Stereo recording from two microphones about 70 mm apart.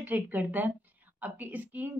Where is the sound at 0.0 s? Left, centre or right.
Right.